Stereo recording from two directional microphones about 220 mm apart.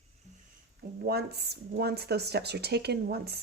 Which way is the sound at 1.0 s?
45° right (ahead or behind).